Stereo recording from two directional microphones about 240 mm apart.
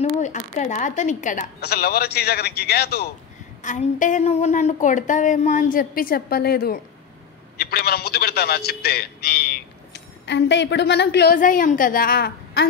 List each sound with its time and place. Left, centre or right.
0.2 s a woman's voice: left